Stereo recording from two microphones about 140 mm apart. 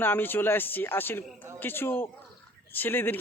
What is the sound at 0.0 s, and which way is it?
Speech, 15° left (ahead or behind).